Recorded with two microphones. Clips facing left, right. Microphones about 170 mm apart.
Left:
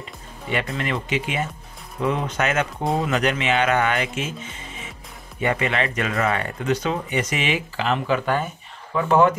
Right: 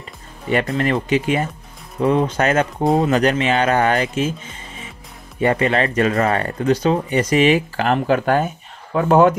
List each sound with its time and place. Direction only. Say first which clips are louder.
0.7 s speech: right 7 dB; 45° right (ahead or behind)
5.4 s speech: right 6 dB; 40° right (ahead or behind)